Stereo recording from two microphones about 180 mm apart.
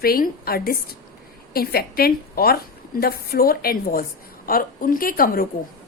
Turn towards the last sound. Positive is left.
turn(degrees=55)  # may be behind; listen again after turning